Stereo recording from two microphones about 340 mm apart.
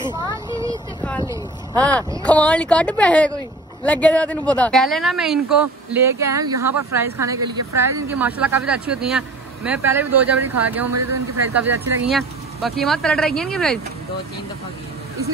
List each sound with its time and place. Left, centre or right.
0.0 s vehicle: centre
0.5 s vehicle: centre
1.2 s a sound: centre
2.2 s speech: centre